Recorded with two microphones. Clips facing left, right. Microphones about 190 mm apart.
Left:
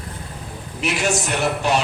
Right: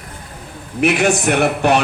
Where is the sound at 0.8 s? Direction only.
60° right (ahead or behind).